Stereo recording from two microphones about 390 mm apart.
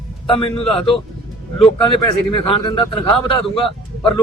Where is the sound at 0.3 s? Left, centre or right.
Centre.